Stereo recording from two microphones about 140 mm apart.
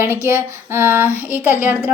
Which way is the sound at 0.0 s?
20° right (ahead or behind).